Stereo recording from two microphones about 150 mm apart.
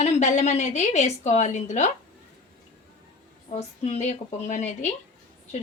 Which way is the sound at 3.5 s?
45° left (ahead or behind).